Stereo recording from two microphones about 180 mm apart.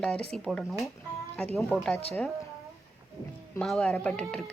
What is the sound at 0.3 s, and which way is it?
A woman's voice, 5° left (ahead or behind).